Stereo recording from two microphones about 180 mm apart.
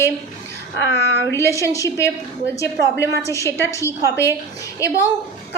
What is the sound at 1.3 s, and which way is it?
A woman's voice, 15° left (ahead or behind).